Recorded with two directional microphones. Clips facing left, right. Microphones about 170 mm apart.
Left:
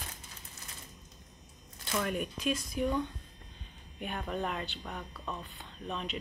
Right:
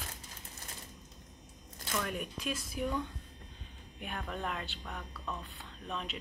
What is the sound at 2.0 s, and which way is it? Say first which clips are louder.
Speech: left 7 dB; centre (ahead or behind).